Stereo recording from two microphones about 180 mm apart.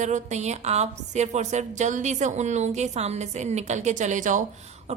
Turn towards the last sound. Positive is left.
turn(degrees=-40)  # may be behind; listen again after turning